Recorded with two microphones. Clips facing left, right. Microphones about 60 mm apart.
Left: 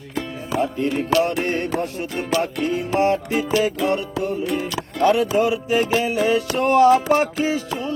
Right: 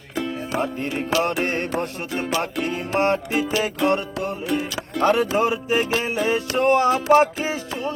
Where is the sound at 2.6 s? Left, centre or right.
Right.